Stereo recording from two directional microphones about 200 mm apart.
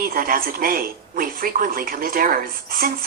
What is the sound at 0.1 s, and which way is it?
A woman's voice, 45° right (ahead or behind).